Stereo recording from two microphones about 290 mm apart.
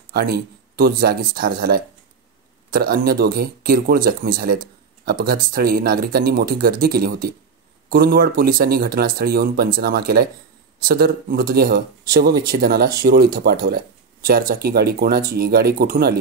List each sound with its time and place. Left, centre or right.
0.1 s speech: right